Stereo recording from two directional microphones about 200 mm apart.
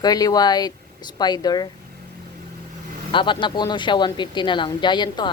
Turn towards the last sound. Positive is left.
turn(degrees=20)  # may be behind; listen again after turning